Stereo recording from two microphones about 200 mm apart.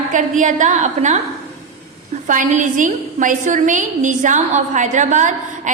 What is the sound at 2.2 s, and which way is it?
A woman's voice, 40° right (ahead or behind).